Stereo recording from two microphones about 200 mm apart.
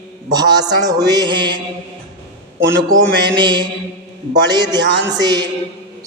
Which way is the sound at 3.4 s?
25° right (ahead or behind).